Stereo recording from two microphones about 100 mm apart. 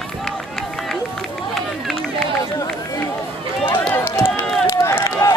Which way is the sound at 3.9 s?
25° left (ahead or behind).